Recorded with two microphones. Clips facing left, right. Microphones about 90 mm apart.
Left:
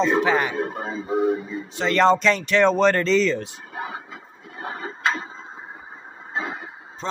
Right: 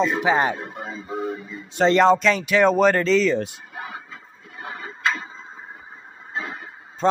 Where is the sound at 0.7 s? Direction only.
35° left (ahead or behind).